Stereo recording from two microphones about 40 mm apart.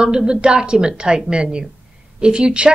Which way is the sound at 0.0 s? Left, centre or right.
Right.